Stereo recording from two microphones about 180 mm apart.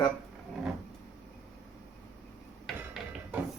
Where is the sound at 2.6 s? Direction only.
Centre (ahead or behind).